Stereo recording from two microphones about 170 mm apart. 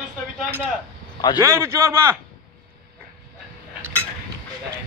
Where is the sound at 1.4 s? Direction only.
15° right (ahead or behind).